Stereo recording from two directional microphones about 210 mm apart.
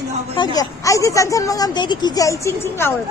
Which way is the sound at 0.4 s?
20° left (ahead or behind).